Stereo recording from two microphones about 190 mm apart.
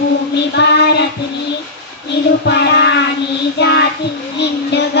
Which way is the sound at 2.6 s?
65° left (ahead or behind).